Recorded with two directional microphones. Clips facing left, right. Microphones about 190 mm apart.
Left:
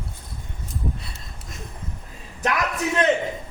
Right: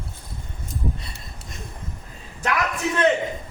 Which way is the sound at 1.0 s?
Centre (ahead or behind).